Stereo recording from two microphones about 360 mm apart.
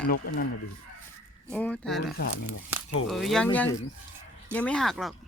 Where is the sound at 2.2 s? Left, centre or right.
Left.